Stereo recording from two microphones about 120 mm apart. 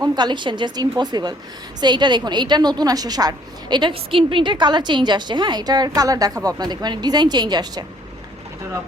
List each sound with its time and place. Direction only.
0.0 s a woman's voice: 35° right (ahead or behind)